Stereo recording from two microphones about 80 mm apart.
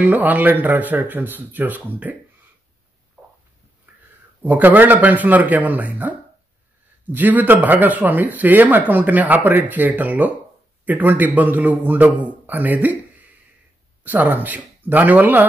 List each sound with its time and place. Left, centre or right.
0.0 s speech: right
3.9 s a sound: right
4.4 s speech: right
14.0 s speech: right